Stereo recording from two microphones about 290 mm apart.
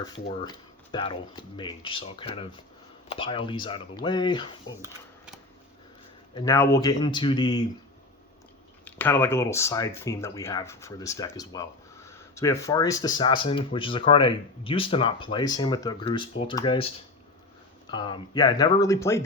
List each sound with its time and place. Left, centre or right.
0.0 s speech: centre
4.8 s a sound: centre
6.3 s speech: centre
8.8 s speech: centre
17.9 s speech: centre